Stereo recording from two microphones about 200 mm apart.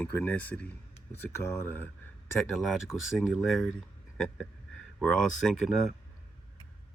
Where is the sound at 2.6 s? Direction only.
Centre (ahead or behind).